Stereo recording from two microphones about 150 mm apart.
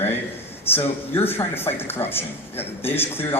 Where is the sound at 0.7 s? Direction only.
15° left (ahead or behind).